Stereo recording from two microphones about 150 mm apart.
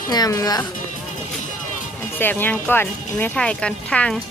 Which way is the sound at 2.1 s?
15° left (ahead or behind).